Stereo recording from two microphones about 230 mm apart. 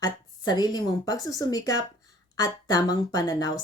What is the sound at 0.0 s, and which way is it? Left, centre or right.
A woman's voice, centre.